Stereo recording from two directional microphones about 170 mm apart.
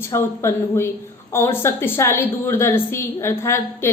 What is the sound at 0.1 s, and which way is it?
A woman's voice, 15° left (ahead or behind).